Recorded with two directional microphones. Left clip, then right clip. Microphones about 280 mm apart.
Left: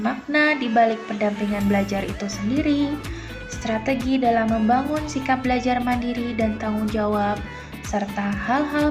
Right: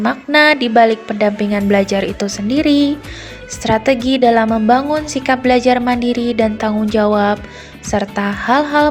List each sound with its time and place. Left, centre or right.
0.0 s a woman's voice: right